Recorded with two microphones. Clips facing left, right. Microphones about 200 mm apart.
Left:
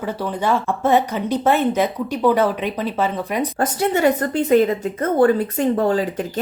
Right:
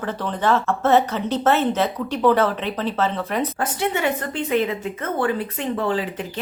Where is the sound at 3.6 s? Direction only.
40° left (ahead or behind).